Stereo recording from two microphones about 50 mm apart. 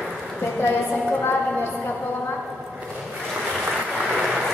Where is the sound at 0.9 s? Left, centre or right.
Left.